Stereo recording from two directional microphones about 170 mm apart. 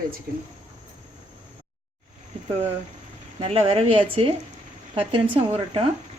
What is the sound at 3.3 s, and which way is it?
Speech, 35° right (ahead or behind).